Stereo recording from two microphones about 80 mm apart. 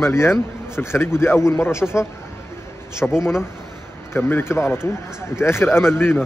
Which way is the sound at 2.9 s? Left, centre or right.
Left.